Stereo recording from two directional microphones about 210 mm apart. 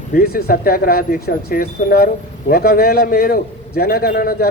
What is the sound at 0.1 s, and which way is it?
A man's voice, 45° left (ahead or behind).